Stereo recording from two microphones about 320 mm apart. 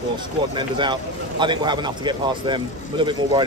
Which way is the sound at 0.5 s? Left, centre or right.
Centre.